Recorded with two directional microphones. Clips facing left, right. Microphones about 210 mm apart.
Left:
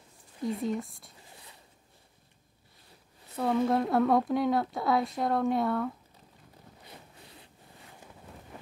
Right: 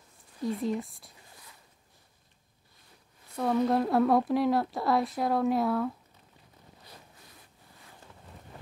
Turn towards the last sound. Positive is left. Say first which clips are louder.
# left 4 dB
turn(degrees=25)  # may be behind; listen again after turning